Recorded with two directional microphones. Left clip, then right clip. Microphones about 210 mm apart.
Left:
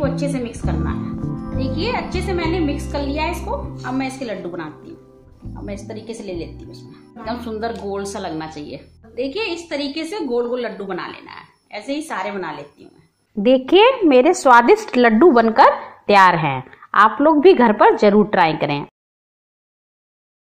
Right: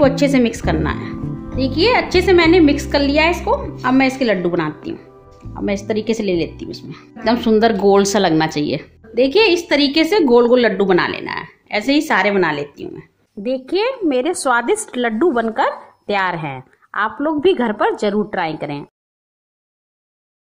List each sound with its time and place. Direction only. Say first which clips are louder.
0.0 s a woman's voice: right 9 dB; 45° right (ahead or behind)
1.0 s music: even; centre (ahead or behind)
1.6 s a woman's voice: right 8 dB; 45° right (ahead or behind)
13.4 s a woman's voice: left 7 dB; centre (ahead or behind)